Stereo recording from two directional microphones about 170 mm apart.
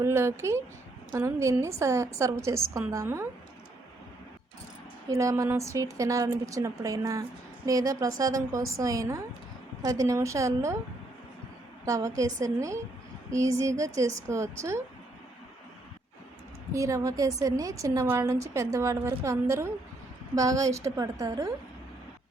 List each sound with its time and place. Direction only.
0.0 s a woman's voice: 15° right (ahead or behind)
5.0 s a woman's voice: 20° right (ahead or behind)
11.9 s a woman's voice: 20° right (ahead or behind)
16.7 s a woman's voice: 20° right (ahead or behind)